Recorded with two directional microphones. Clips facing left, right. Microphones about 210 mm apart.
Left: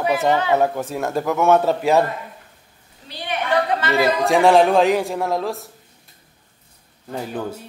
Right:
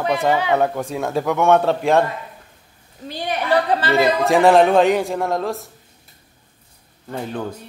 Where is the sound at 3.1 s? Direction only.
35° right (ahead or behind).